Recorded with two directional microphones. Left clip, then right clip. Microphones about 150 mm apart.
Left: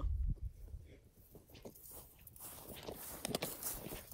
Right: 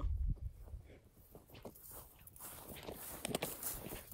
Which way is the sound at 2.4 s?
15° right (ahead or behind).